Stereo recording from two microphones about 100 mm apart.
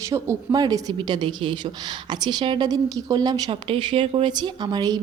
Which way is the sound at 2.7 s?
40° right (ahead or behind).